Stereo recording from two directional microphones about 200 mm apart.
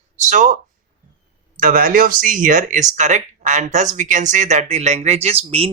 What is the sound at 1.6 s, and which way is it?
Speech, 45° right (ahead or behind).